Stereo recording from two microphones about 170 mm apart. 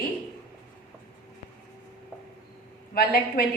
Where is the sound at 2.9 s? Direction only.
65° left (ahead or behind).